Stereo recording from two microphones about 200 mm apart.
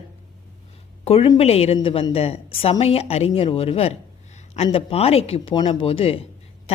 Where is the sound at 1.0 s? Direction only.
30° left (ahead or behind).